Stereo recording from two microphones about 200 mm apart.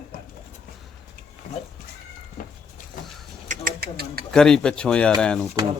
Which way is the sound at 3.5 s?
45° right (ahead or behind).